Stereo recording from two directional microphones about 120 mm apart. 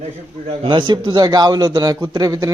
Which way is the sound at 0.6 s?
45° right (ahead or behind).